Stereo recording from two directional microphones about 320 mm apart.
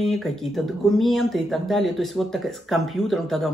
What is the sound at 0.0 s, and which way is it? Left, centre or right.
Speech, centre.